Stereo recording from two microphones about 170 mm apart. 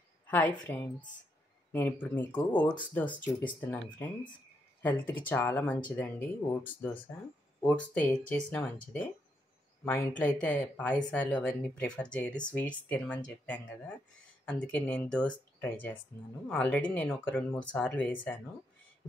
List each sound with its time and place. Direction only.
0.3 s speech: 10° left (ahead or behind)